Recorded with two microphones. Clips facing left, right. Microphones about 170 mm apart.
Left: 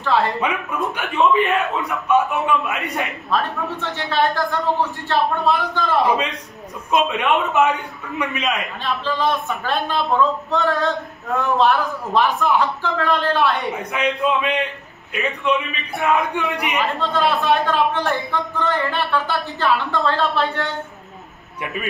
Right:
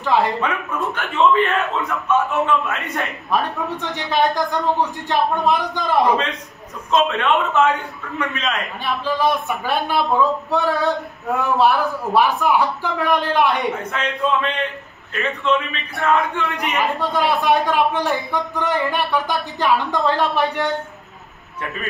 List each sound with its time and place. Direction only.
0.0 s speech: 15° right (ahead or behind)
0.4 s a man's voice: 15° left (ahead or behind)
3.3 s a man's voice: 15° right (ahead or behind)
6.9 s a man's voice: 15° left (ahead or behind)
8.8 s a man's voice: 10° right (ahead or behind)
13.7 s a man's voice: 15° left (ahead or behind)
17.0 s a man's voice: 15° right (ahead or behind)